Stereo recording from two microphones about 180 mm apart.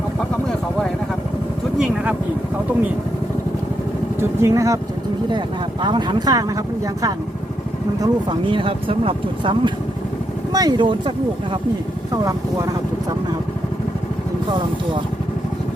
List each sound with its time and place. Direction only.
4.2 s speech: 15° right (ahead or behind)
5.8 s speech: 25° right (ahead or behind)
8.0 s speech: 25° right (ahead or behind)
12.1 s speech: 20° right (ahead or behind)